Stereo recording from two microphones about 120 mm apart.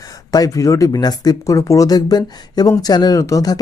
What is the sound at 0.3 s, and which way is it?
Speech, 30° left (ahead or behind).